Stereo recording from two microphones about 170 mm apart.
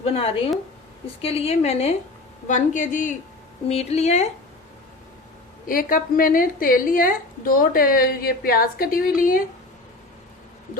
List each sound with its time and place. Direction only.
0.0 s a woman's voice: 35° left (ahead or behind)
5.6 s a woman's voice: 55° left (ahead or behind)